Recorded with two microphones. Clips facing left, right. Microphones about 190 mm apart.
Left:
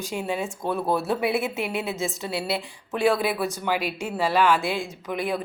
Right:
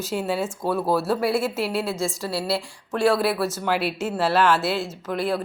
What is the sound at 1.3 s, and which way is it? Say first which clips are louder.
A woman's voice: right 2 dB; 20° left (ahead or behind).